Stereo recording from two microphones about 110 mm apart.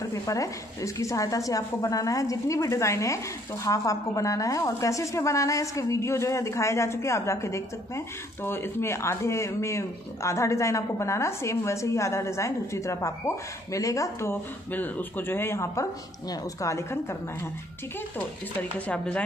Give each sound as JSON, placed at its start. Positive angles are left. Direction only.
{"t": 0.0, "sound": "a woman's voice", "side_deg": 30}
{"t": 18.1, "sound": "speech", "side_deg": 10}